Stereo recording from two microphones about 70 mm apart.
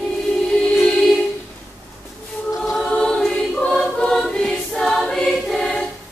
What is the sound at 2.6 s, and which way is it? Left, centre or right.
Choir, centre.